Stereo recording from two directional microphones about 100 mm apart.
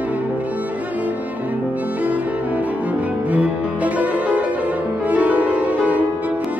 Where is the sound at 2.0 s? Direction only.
15° right (ahead or behind).